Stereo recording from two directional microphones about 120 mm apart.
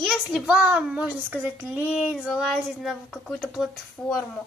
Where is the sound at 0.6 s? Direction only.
5° right (ahead or behind).